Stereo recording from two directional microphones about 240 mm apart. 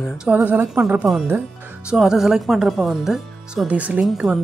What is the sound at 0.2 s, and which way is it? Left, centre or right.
Speech, centre.